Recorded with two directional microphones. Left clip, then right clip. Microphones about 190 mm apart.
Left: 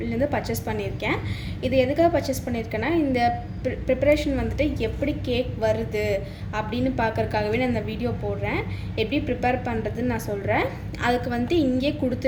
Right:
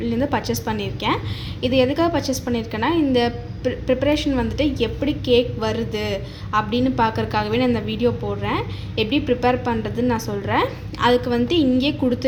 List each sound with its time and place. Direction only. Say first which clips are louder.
0.0 s a woman's voice: right 3 dB; 40° right (ahead or behind)